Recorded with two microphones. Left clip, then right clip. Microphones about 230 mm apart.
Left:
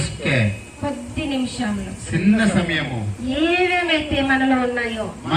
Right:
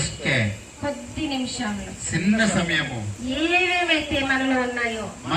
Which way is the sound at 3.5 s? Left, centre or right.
Centre.